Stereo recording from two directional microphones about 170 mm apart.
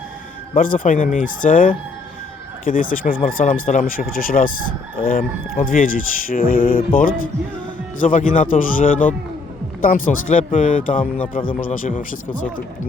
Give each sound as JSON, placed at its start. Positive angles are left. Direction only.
{"t": 0.5, "sound": "fowl", "side_deg": 55}
{"t": 3.2, "sound": "speech", "side_deg": 55}
{"t": 8.0, "sound": "fowl", "side_deg": 50}